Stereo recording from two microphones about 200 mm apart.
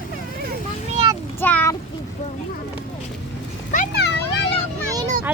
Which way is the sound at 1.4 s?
10° left (ahead or behind).